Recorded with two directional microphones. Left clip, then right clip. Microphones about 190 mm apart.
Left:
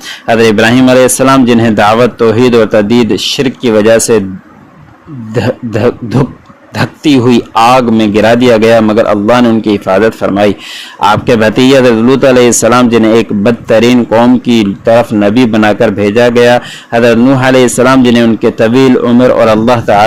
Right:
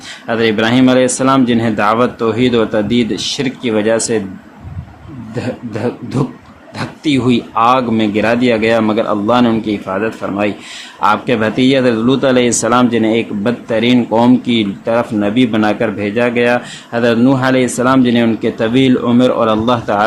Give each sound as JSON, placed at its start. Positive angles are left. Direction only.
{"t": 0.3, "sound": "a man's voice", "side_deg": 40}
{"t": 5.3, "sound": "a man's voice", "side_deg": 40}